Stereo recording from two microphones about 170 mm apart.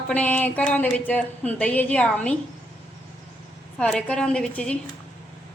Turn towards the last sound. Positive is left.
turn(degrees=5)  # may be behind; listen again after turning